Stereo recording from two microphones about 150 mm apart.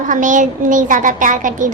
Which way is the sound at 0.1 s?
60° right (ahead or behind).